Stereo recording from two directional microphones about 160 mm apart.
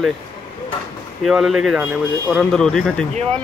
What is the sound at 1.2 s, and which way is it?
Speech, centre (ahead or behind).